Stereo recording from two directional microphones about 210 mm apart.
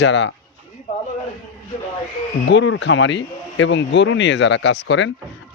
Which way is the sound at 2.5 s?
60° left (ahead or behind).